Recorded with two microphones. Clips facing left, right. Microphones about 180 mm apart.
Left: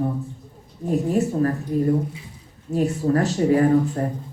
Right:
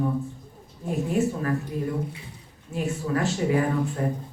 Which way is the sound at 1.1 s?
40° left (ahead or behind).